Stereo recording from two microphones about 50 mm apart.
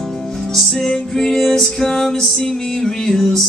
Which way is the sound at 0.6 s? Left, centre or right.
Centre.